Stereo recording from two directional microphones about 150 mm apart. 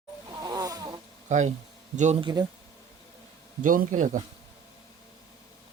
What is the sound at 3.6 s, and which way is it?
Speech, 60° right (ahead or behind).